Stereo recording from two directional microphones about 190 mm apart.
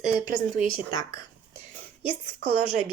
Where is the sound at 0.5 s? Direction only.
45° right (ahead or behind).